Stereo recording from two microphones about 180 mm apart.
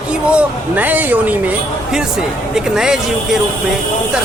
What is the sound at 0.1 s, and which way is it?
Speech, 5° right (ahead or behind).